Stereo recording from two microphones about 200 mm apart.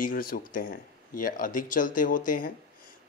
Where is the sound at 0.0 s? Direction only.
45° left (ahead or behind).